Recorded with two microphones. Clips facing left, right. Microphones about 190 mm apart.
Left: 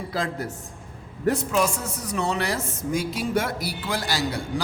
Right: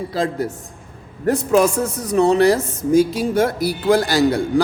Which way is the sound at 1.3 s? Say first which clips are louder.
Right 7 dB; 45° right (ahead or behind).